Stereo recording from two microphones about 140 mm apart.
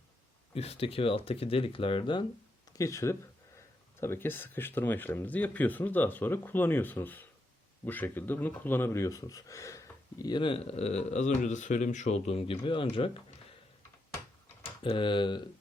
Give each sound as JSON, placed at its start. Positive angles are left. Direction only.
{"t": 0.5, "sound": "speech", "side_deg": 45}
{"t": 2.7, "sound": "speech", "side_deg": 20}
{"t": 14.1, "sound": "a sound", "side_deg": 15}
{"t": 14.8, "sound": "speech", "side_deg": 35}